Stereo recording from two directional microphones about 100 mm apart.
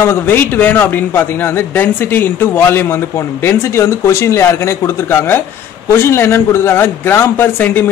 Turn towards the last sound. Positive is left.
turn(degrees=20)  # may be behind; listen again after turning